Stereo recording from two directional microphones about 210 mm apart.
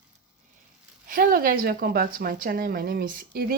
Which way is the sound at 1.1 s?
45° right (ahead or behind).